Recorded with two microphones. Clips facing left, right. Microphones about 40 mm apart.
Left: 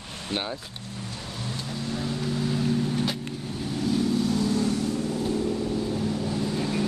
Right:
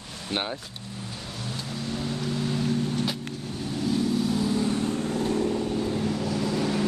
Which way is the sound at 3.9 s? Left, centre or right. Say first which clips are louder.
Left 1 dB; centre.